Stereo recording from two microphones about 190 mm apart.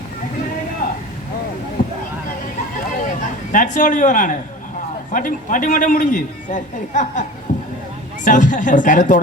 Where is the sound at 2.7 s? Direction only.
45° left (ahead or behind).